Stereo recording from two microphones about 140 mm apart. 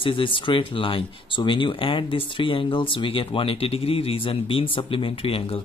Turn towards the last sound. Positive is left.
turn(degrees=40)  # may be behind; listen again after turning